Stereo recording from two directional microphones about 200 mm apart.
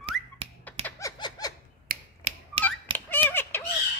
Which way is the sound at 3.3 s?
10° left (ahead or behind).